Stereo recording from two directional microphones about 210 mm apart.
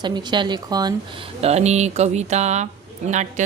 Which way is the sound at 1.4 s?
30° right (ahead or behind).